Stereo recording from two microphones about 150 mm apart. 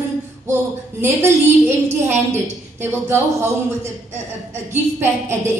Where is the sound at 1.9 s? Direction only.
15° right (ahead or behind).